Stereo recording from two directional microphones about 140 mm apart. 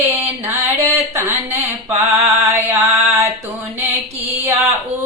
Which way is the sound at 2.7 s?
20° right (ahead or behind).